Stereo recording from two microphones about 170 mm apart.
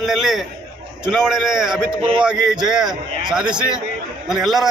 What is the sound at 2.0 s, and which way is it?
Speech, 30° right (ahead or behind).